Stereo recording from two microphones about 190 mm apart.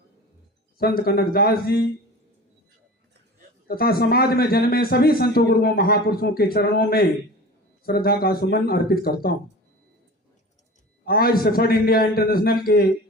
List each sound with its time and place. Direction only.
0.8 s a man's voice: 55° left (ahead or behind)
3.7 s a man's voice: 50° left (ahead or behind)
11.0 s a man's voice: 50° left (ahead or behind)